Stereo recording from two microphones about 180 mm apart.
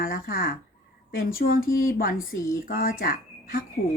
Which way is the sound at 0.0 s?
50° left (ahead or behind).